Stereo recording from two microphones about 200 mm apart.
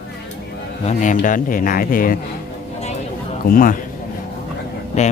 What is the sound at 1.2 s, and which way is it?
Speech, 45° left (ahead or behind).